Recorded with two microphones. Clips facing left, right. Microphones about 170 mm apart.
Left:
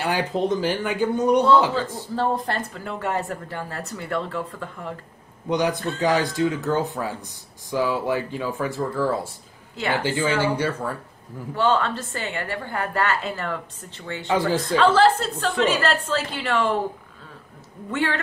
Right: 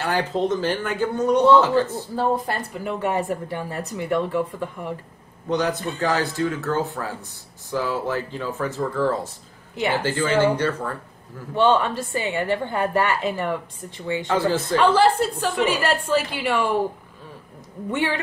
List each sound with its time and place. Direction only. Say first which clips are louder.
0.0 s speech: right 1 dB; 15° left (ahead or behind)
2.1 s a woman's voice: right 1 dB; 5° right (ahead or behind)
5.5 s speech: even; 15° left (ahead or behind)
11.5 s a woman's voice: right 3 dB; 20° right (ahead or behind)
14.2 s speech: left 1 dB; 15° left (ahead or behind)
14.8 s a woman's voice: even; 15° right (ahead or behind)
17.9 s a woman's voice: right 1 dB; 15° right (ahead or behind)